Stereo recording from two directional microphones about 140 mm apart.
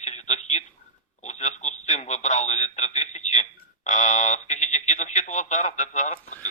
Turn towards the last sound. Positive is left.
turn(degrees=60)  # may be behind; listen again after turning